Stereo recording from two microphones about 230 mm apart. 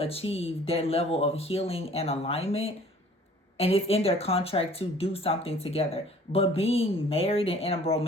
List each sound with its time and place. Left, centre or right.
0.0 s speech: left